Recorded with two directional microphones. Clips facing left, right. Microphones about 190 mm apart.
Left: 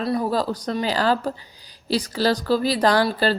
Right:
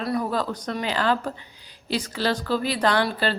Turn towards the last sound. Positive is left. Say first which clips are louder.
# left 4 dB
turn(degrees=35)  # may be behind; listen again after turning